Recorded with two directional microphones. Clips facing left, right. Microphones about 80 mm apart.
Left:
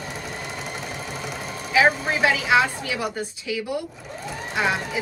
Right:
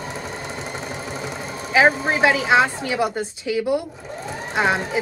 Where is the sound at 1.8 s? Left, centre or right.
Right.